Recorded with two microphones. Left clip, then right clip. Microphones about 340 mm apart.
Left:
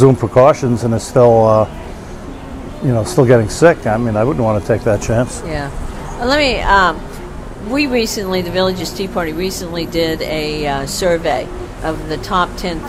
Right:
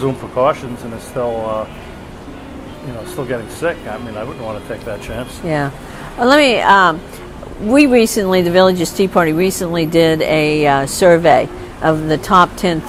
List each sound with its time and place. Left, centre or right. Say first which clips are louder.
0.0 s speech: left 6 dB; left
3.2 s speech: left 11 dB; left
6.1 s speech: right 4 dB; right
7.7 s speech: right 5 dB; right